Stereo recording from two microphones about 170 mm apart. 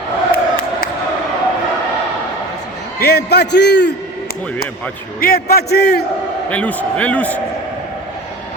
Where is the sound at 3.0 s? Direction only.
70° left (ahead or behind).